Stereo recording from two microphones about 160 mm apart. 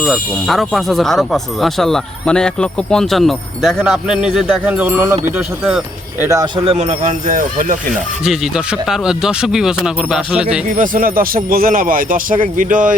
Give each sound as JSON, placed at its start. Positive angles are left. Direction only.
{"t": 0.0, "sound": "speech", "side_deg": 0}
{"t": 5.4, "sound": "speech", "side_deg": -5}
{"t": 6.2, "sound": "speech", "side_deg": -20}
{"t": 6.7, "sound": "speech", "side_deg": -45}
{"t": 8.2, "sound": "speech", "side_deg": -5}
{"t": 10.7, "sound": "speech", "side_deg": -55}